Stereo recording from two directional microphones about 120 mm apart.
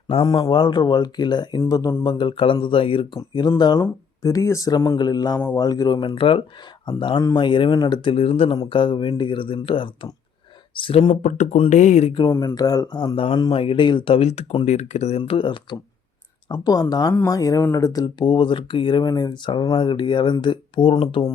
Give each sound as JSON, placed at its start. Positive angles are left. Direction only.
{"t": 0.4, "sound": "speech", "side_deg": 40}
{"t": 2.0, "sound": "speech", "side_deg": 45}
{"t": 3.6, "sound": "speech", "side_deg": 35}
{"t": 8.1, "sound": "speech", "side_deg": 50}
{"t": 11.1, "sound": "speech", "side_deg": 90}
{"t": 12.5, "sound": "speech", "side_deg": 30}
{"t": 15.2, "sound": "speech", "side_deg": 45}
{"t": 16.5, "sound": "speech", "side_deg": 35}